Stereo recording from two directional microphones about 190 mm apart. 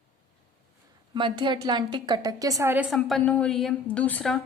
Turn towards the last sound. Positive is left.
turn(degrees=5)  # may be behind; listen again after turning